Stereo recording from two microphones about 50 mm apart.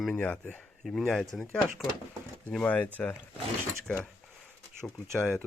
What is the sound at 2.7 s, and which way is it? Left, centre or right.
Speech, left.